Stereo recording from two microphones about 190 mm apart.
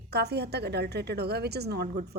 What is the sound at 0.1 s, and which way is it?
Speech, 60° right (ahead or behind).